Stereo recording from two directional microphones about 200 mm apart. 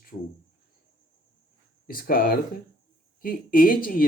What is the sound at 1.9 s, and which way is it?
Speech, 45° left (ahead or behind).